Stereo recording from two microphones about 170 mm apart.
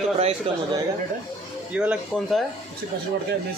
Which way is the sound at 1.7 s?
5° right (ahead or behind).